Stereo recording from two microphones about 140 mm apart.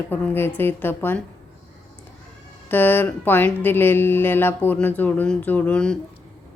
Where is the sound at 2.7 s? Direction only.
15° left (ahead or behind).